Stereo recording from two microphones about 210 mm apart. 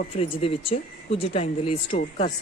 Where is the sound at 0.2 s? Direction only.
25° left (ahead or behind).